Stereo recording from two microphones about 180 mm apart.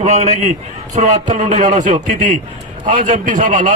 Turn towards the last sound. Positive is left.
turn(degrees=-45)  # may be behind; listen again after turning